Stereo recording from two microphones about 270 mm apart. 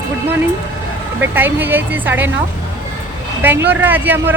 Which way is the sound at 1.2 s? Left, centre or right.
Centre.